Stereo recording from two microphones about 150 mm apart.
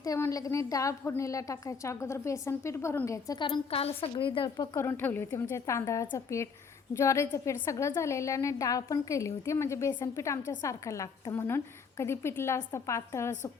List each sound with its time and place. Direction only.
0.0 s a woman's voice: 25° left (ahead or behind)
4.9 s a woman's voice: 15° left (ahead or behind)